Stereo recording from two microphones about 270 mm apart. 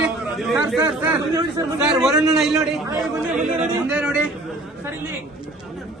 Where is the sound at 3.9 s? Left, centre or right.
Centre.